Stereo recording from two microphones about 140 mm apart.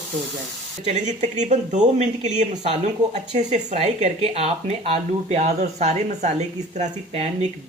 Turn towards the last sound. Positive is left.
turn(degrees=-55)  # may be behind; listen again after turning